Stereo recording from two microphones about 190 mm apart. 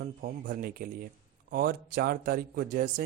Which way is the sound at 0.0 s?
50° right (ahead or behind).